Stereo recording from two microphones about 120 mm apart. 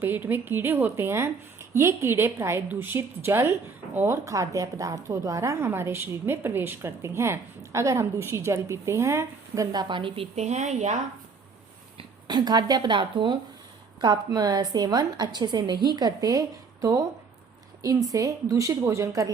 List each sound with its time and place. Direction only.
0.0 s a woman's voice: 20° right (ahead or behind)
9.7 s a woman's voice: 45° right (ahead or behind)
10.3 s speech: 70° right (ahead or behind)
11.9 s a woman's voice: 40° right (ahead or behind)
17.8 s a woman's voice: 30° right (ahead or behind)